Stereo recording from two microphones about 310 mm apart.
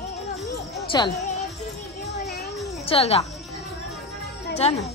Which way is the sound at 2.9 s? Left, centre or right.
Centre.